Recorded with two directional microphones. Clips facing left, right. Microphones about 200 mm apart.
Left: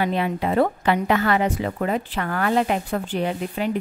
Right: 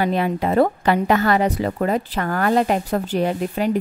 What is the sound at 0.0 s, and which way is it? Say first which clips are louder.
A woman's voice: right 3 dB; 40° right (ahead or behind).